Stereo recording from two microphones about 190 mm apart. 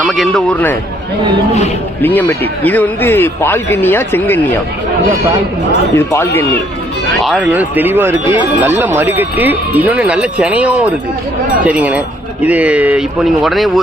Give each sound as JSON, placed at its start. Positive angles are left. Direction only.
{"t": 0.0, "sound": "a man's voice", "side_deg": 0}
{"t": 2.0, "sound": "a man's voice", "side_deg": 10}
{"t": 6.0, "sound": "a man's voice", "side_deg": 10}
{"t": 7.2, "sound": "speech", "side_deg": -5}